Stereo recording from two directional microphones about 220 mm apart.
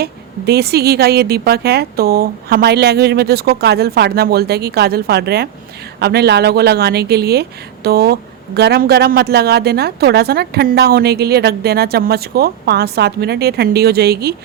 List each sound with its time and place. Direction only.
0.0 s speech: 45° right (ahead or behind)